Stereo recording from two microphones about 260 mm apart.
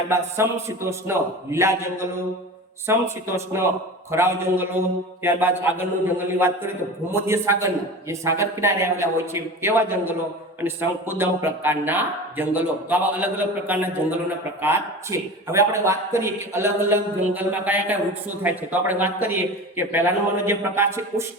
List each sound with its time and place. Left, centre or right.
0.1 s a man's voice: centre